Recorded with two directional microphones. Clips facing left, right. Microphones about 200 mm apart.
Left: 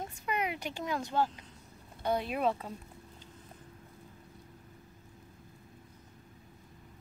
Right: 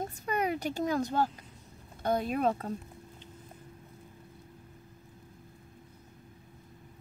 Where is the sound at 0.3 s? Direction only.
40° right (ahead or behind).